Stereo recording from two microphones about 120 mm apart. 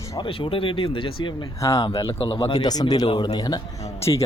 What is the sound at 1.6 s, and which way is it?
Speech, 25° left (ahead or behind).